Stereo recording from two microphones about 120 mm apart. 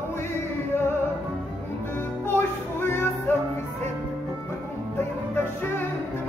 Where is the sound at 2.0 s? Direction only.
20° left (ahead or behind).